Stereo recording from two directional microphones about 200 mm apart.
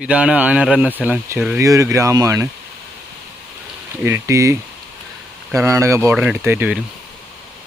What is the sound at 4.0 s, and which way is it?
Speech, 15° right (ahead or behind).